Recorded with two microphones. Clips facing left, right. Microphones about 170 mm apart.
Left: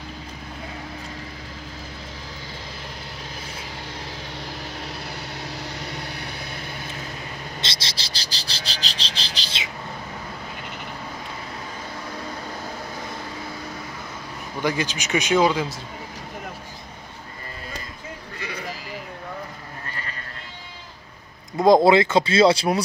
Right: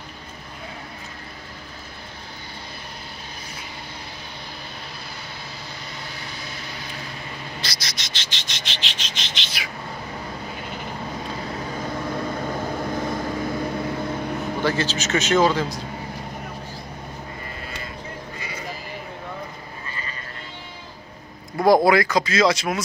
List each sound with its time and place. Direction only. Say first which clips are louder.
7.6 s frog: even; 25° left (ahead or behind)
13.1 s vehicle: right 8 dB; 50° right (ahead or behind)
14.6 s a man's voice: even; 15° left (ahead or behind)
21.5 s speech: left 1 dB; 20° left (ahead or behind)